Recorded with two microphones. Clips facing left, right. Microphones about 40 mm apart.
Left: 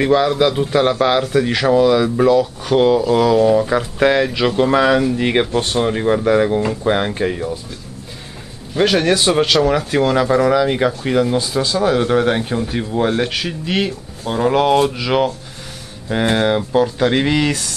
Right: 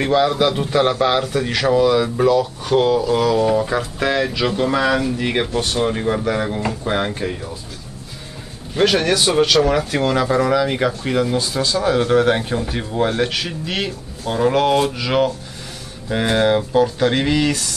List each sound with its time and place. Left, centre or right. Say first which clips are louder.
0.0 s speech: left 2 dB; centre
4.0 s speech: left 5 dB; centre
5.5 s speech: left 2 dB; left
5.9 s speech: left 4 dB; centre
8.7 s speech: left 1 dB; centre
9.0 s speech: left 2 dB; centre
9.6 s speech: left 2 dB; centre